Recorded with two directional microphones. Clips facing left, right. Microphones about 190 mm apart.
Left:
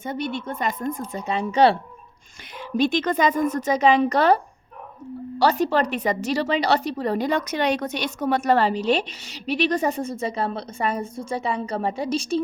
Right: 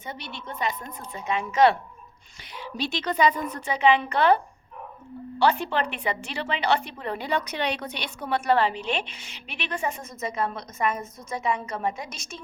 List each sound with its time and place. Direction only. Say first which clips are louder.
0.0 s a woman's voice: left 10 dB; 50° left (ahead or behind); by 1.8 s 35° left (ahead or behind)
2.6 s a woman's voice: left 9 dB; 50° left (ahead or behind)
5.4 s a woman's voice: left 4 dB; 40° left (ahead or behind)